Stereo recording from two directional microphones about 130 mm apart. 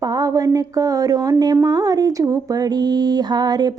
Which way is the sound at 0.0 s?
30° right (ahead or behind).